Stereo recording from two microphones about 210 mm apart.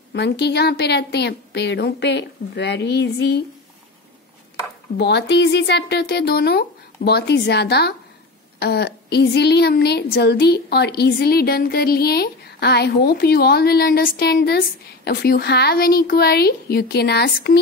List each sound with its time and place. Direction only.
0.1 s a woman's voice: 55° left (ahead or behind)
4.9 s a woman's voice: 55° left (ahead or behind)